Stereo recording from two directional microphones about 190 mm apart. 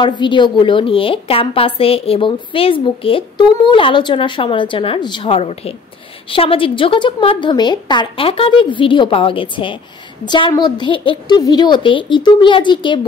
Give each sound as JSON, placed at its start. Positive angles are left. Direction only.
{"t": 0.2, "sound": "a woman's voice", "side_deg": 25}